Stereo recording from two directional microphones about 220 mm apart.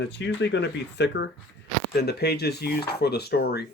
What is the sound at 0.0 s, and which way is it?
Speech, 55° left (ahead or behind).